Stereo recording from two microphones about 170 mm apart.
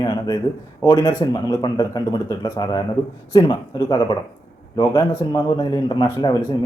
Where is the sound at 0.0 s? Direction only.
20° left (ahead or behind).